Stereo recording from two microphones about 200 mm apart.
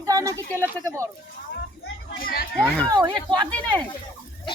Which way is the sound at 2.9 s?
20° right (ahead or behind).